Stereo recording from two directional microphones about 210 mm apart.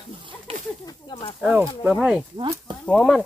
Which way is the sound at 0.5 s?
25° right (ahead or behind).